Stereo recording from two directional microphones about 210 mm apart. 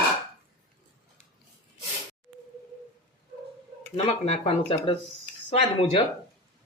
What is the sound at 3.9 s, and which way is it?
A woman's voice, 30° left (ahead or behind).